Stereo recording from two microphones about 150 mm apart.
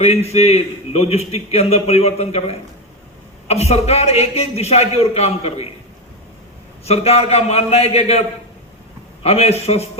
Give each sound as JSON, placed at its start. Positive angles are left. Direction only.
{"t": 0.0, "sound": "a man's voice", "side_deg": 45}
{"t": 6.8, "sound": "a man's voice", "side_deg": 45}
{"t": 9.2, "sound": "a man's voice", "side_deg": 45}